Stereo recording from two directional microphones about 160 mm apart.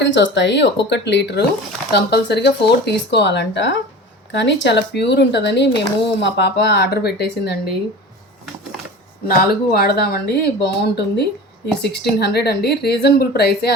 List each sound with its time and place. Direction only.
0.0 s a woman's voice: 90° left
9.2 s a woman's voice: 70° left (ahead or behind); by 13.7 s 90° left